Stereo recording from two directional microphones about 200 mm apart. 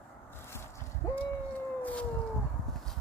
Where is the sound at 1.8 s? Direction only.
10° left (ahead or behind).